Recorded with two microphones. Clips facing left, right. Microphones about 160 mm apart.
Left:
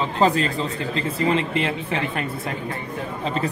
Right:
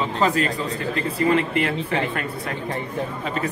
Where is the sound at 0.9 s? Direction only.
25° left (ahead or behind).